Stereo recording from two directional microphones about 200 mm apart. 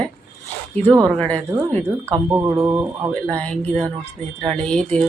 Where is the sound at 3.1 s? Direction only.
5° left (ahead or behind).